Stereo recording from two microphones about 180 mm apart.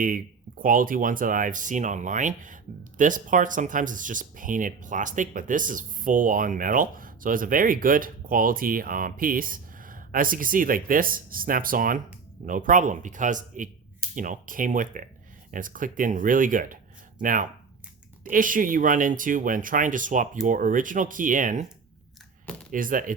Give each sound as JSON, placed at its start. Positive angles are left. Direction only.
{"t": 0.0, "sound": "speech", "side_deg": -50}
{"t": 22.7, "sound": "speech", "side_deg": -50}